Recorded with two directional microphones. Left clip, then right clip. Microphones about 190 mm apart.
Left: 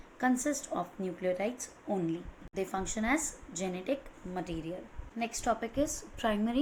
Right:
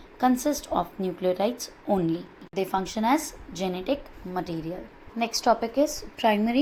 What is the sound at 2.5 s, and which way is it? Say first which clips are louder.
A woman's voice: right 8 dB; 25° right (ahead or behind).